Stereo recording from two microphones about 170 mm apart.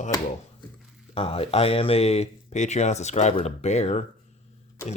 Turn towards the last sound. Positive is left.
turn(degrees=40)  # may be behind; listen again after turning